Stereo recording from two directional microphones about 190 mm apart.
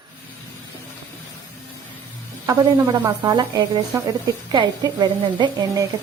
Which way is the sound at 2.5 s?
25° right (ahead or behind).